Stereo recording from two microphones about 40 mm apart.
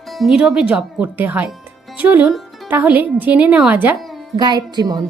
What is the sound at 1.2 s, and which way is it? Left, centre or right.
A woman's voice, right.